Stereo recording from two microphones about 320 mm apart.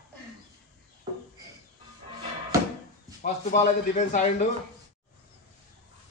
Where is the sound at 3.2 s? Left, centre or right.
Left.